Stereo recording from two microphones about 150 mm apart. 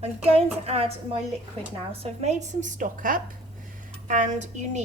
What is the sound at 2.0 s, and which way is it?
Speech, 45° right (ahead or behind).